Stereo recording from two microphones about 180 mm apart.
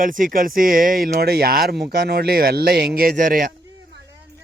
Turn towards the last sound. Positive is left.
turn(degrees=-50)  # may be behind; listen again after turning